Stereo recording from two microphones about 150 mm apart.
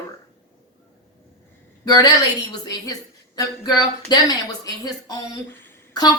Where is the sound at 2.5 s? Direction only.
25° left (ahead or behind).